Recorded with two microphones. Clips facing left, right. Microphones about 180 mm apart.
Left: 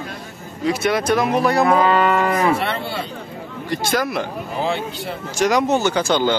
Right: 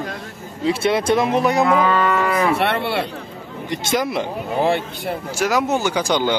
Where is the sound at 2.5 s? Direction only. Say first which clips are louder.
Right 4 dB; 65° right (ahead or behind).